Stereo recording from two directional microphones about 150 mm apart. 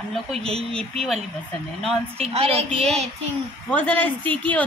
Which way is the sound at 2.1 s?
40° right (ahead or behind).